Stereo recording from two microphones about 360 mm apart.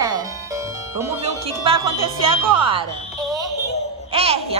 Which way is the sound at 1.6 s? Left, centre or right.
Centre.